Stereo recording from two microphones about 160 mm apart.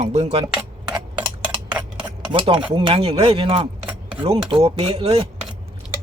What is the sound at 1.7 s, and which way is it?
Cutlery, 10° right (ahead or behind).